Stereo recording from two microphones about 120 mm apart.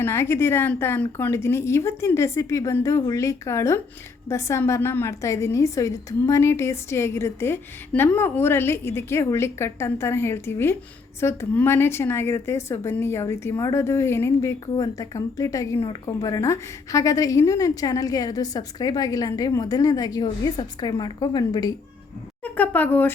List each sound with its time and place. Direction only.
0.0 s a woman's voice: 20° left (ahead or behind)
22.4 s speech: 10° left (ahead or behind)